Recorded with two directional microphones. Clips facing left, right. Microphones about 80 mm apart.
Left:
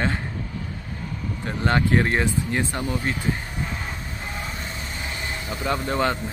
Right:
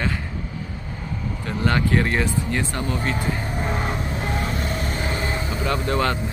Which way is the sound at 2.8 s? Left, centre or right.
Right.